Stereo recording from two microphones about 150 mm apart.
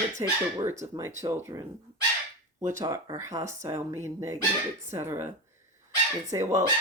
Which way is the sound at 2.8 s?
20° right (ahead or behind).